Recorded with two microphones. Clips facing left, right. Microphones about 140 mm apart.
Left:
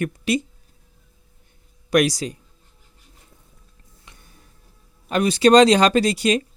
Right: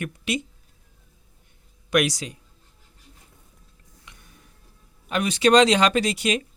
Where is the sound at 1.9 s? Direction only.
35° left (ahead or behind).